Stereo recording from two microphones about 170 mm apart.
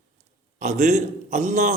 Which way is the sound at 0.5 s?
45° right (ahead or behind).